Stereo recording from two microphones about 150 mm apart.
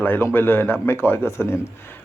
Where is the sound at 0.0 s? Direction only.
15° left (ahead or behind).